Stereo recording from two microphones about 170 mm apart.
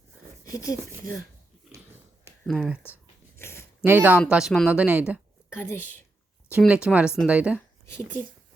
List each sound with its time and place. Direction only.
0.4 s speech: 20° left (ahead or behind)
2.5 s speech: 5° right (ahead or behind)
3.3 s a sound: 15° left (ahead or behind)
3.8 s speech: 10° right (ahead or behind)
5.5 s a woman's voice: 15° left (ahead or behind)
6.6 s speech: 5° right (ahead or behind)
7.9 s speech: 15° left (ahead or behind)